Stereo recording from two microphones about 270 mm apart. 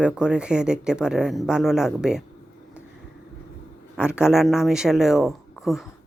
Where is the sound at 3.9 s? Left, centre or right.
Centre.